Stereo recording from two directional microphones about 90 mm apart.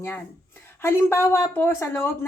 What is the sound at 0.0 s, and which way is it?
Speech, 25° left (ahead or behind).